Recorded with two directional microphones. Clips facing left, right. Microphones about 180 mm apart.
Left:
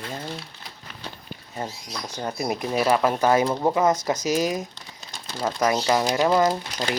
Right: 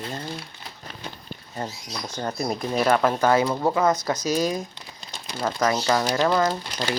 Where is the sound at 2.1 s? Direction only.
10° left (ahead or behind).